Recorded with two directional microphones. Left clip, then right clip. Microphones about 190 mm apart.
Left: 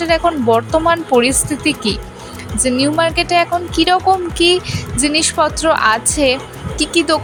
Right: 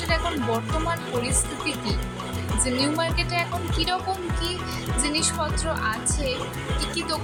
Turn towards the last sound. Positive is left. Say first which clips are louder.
# left 13 dB
turn(degrees=40)  # may be behind; listen again after turning